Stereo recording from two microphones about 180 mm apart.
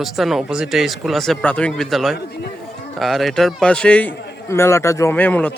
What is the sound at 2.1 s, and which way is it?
Speech, 65° left (ahead or behind).